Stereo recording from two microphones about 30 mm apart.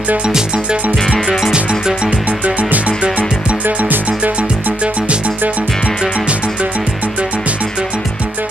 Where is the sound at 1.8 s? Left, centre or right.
Right.